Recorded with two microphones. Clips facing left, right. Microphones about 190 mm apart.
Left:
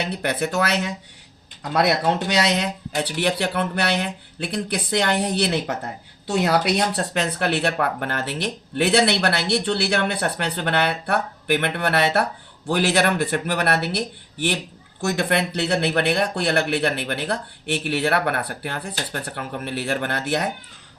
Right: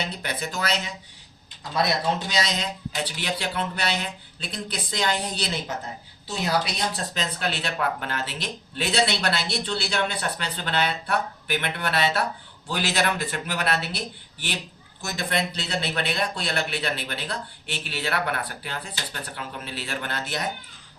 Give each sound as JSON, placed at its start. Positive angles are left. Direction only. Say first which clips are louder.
{"t": 0.0, "sound": "a man's voice", "louder": "left 7 dB", "side_deg": 65}
{"t": 15.0, "sound": "a man's voice", "louder": "left 6 dB", "side_deg": 65}